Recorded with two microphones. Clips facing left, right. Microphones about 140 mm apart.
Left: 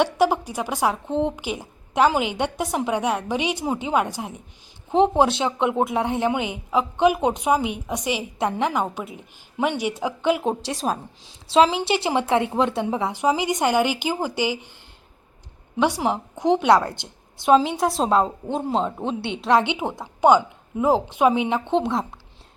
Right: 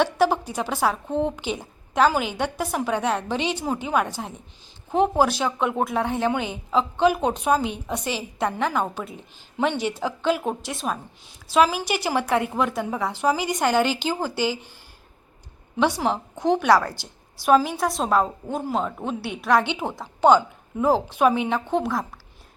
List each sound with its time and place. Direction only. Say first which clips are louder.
0.0 s speech: left 1 dB; 15° left (ahead or behind)
10.7 s a woman's voice: left 3 dB; 35° left (ahead or behind); by 14.7 s 15° left (ahead or behind)
15.8 s a woman's voice: left 1 dB; 15° left (ahead or behind)